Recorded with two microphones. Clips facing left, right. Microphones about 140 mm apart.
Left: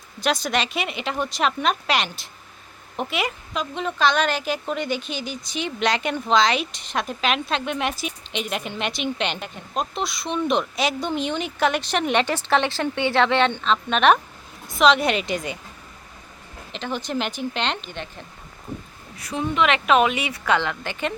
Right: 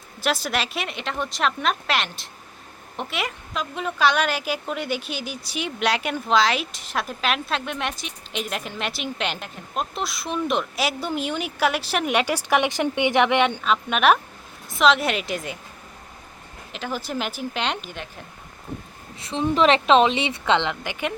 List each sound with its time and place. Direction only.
0.2 s a woman's voice: 5° right (ahead or behind)
16.7 s speech: 5° right (ahead or behind)
19.2 s speech: 30° right (ahead or behind); by 21.1 s 15° right (ahead or behind)